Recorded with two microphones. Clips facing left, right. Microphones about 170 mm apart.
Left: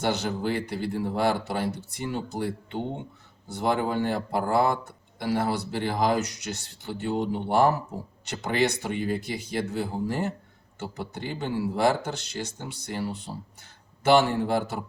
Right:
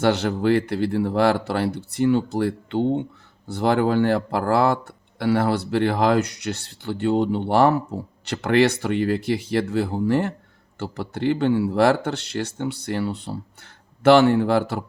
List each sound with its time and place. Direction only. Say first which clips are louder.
0.0 s speech: right 7 dB; 65° right (ahead or behind)